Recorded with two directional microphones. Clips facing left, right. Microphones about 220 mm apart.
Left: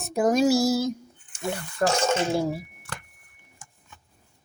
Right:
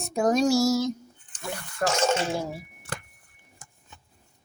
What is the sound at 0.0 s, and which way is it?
Speech, 5° left (ahead or behind).